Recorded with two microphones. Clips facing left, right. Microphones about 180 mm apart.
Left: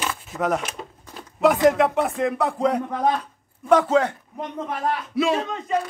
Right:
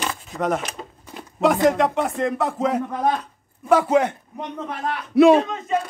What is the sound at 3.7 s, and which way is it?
Speech, 15° right (ahead or behind).